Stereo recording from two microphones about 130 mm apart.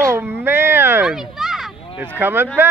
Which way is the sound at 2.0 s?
15° right (ahead or behind).